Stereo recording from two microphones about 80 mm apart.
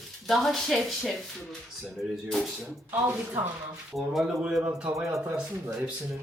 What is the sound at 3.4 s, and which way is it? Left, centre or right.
Speech, right.